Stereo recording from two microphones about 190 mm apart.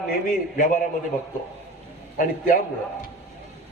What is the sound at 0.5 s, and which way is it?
Speech, 45° left (ahead or behind).